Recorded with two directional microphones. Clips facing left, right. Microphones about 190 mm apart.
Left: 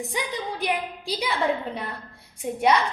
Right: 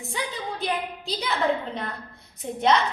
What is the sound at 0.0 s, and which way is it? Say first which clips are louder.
A woman's voice: left 2 dB; 15° left (ahead or behind).